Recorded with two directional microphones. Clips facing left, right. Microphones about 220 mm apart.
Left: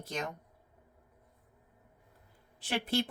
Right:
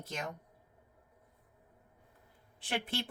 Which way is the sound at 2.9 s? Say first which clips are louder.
Left 7 dB; 40° left (ahead or behind).